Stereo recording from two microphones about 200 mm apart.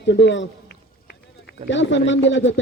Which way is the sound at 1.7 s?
65° left (ahead or behind).